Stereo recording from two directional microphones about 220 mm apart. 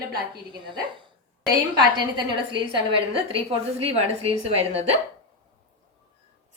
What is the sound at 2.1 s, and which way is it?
A woman's voice, 20° right (ahead or behind).